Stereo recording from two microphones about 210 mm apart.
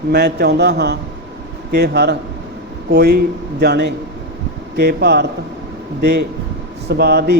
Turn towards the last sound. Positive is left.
turn(degrees=-50)  # may be behind; listen again after turning